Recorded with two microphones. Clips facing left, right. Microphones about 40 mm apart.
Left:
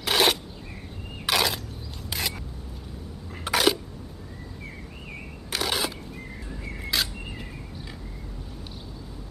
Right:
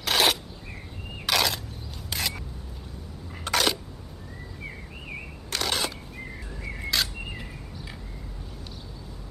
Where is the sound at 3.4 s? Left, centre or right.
Centre.